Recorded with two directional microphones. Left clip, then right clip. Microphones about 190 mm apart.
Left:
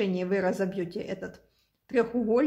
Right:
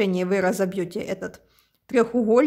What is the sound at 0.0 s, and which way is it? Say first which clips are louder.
Speech: right 5 dB; 40° right (ahead or behind).